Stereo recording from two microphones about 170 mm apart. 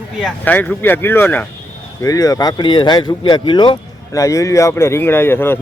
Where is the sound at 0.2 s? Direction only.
5° left (ahead or behind).